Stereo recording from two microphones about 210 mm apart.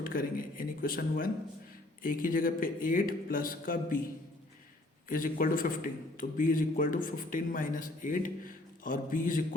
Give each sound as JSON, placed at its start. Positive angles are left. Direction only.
{"t": 0.1, "sound": "a man's voice", "side_deg": 40}
{"t": 5.0, "sound": "a man's voice", "side_deg": 40}